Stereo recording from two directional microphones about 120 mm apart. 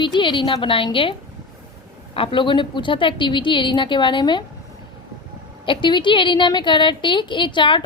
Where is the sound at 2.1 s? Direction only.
45° left (ahead or behind).